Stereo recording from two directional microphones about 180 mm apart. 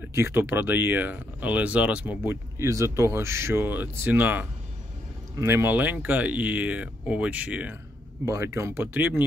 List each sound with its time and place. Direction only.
0.1 s speech: 15° right (ahead or behind)